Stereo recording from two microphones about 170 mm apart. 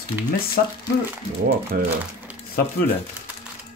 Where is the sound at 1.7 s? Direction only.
65° right (ahead or behind).